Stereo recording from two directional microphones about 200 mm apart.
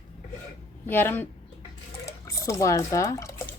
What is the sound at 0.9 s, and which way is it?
Speech, 10° left (ahead or behind).